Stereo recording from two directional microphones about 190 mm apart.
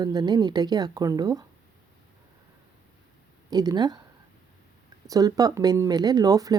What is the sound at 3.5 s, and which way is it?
Speech, 20° right (ahead or behind).